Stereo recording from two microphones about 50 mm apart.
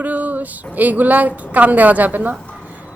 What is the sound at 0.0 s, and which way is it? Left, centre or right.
Speech, right.